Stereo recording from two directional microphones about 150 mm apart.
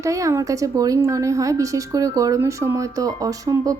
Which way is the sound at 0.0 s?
20° right (ahead or behind).